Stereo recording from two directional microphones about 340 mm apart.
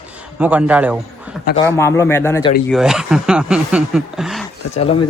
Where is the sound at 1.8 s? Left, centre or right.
Centre.